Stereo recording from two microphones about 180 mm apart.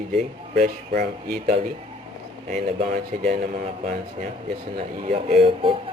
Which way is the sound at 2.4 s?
45° right (ahead or behind).